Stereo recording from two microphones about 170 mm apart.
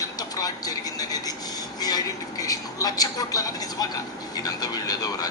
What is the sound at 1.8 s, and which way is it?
A man's voice, 20° left (ahead or behind).